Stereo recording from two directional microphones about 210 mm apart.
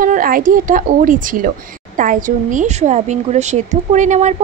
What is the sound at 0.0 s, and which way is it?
A woman's voice, 40° right (ahead or behind).